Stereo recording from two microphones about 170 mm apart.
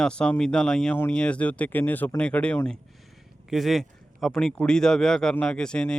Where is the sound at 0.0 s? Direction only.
5° left (ahead or behind).